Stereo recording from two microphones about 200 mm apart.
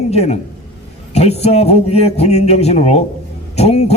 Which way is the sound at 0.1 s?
30° left (ahead or behind).